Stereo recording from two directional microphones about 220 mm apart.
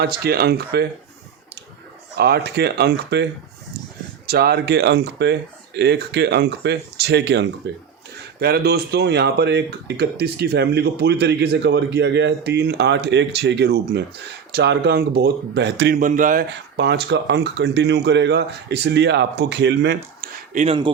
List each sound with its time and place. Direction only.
0.3 s speech: 45° right (ahead or behind)
2.1 s speech: 45° right (ahead or behind)
4.3 s speech: 45° right (ahead or behind)
16.0 s speech: 35° right (ahead or behind)
20.5 s speech: 35° right (ahead or behind)